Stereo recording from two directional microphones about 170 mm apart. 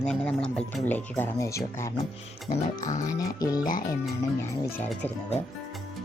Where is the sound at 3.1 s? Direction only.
20° left (ahead or behind).